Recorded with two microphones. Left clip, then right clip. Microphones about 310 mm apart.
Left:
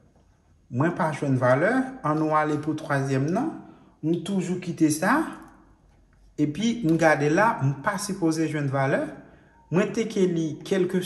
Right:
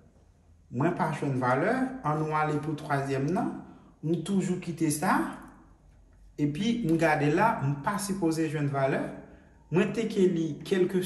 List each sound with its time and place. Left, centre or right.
0.7 s speech: left
4.6 s speech: left
6.3 s speech: left